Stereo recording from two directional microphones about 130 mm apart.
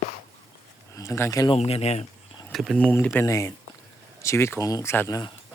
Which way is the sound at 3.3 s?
25° left (ahead or behind).